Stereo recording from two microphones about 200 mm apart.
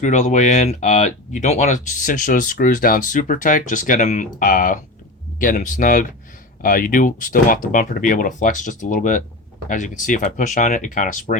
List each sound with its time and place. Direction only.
0.0 s speech: 40° left (ahead or behind)